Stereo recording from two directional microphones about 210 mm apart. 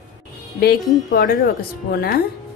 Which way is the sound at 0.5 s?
45° left (ahead or behind).